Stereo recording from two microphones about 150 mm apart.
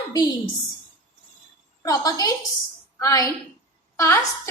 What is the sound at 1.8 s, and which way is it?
A woman's voice, 25° left (ahead or behind).